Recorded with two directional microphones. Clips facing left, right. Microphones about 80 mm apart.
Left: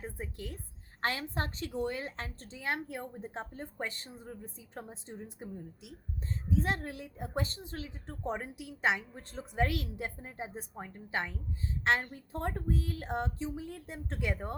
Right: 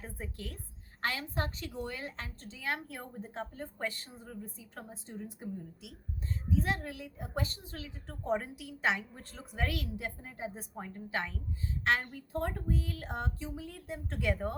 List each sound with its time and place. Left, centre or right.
0.0 s a woman's voice: centre
1.0 s a woman's voice: left
6.6 s a woman's voice: left